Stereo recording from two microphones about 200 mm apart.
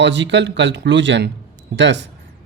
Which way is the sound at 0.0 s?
60° right (ahead or behind).